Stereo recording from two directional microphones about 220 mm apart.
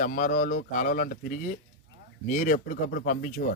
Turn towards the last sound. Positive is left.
turn(degrees=35)  # may be behind; listen again after turning